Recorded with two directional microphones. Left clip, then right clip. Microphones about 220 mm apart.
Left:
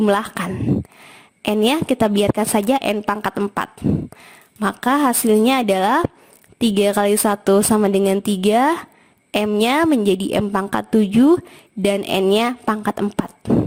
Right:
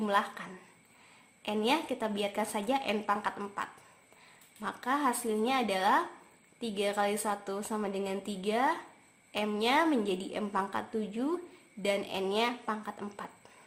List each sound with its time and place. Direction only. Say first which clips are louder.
0.0 s a woman's voice: left 12 dB; 45° left (ahead or behind)